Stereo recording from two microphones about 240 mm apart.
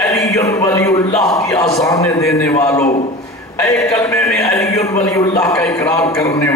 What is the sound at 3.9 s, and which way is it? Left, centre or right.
A man's voice, centre.